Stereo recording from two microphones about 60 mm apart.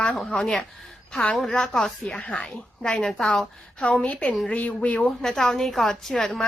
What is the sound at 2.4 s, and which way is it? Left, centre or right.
A woman's voice, centre.